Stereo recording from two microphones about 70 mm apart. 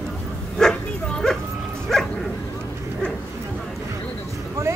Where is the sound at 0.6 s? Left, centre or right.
Centre.